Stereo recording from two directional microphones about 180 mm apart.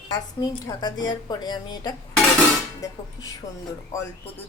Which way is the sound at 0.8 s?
20° left (ahead or behind).